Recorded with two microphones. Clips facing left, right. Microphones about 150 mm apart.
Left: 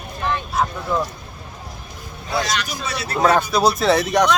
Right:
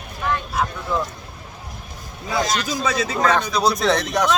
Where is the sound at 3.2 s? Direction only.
10° left (ahead or behind).